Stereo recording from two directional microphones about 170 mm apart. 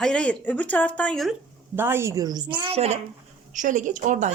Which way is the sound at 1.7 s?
15° right (ahead or behind).